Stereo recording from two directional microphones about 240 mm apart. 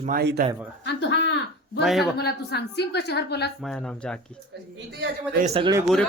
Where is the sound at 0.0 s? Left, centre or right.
Right.